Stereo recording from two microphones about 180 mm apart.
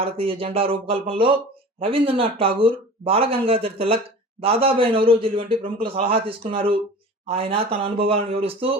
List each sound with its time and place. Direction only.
0.0 s speech: 30° right (ahead or behind)